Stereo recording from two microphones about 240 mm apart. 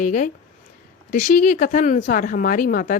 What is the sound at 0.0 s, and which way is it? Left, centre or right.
Speech, left.